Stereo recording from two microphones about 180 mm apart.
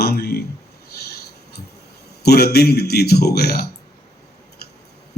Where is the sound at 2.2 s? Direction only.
60° left (ahead or behind).